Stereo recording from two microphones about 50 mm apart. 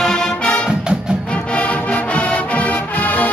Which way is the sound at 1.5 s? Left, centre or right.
Left.